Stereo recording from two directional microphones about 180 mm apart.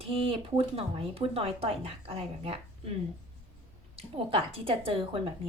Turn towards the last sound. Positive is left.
turn(degrees=-30)  # may be behind; listen again after turning